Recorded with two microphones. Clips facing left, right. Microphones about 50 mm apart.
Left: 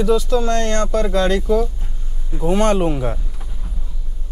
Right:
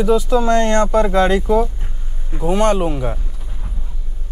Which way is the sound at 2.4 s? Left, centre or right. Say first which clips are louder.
Right 1 dB; centre.